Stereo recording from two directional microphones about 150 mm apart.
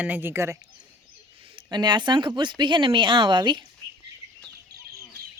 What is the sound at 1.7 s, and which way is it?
Speech, 30° right (ahead or behind).